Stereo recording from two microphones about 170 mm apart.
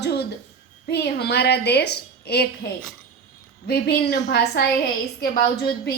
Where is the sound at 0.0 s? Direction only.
75° left (ahead or behind).